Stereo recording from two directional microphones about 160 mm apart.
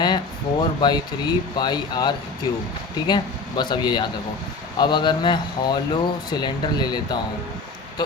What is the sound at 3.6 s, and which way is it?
Speech, 25° left (ahead or behind).